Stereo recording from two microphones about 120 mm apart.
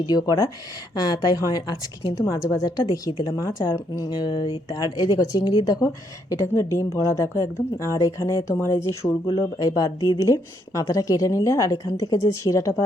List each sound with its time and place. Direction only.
0.0 s a woman's voice: 35° left (ahead or behind)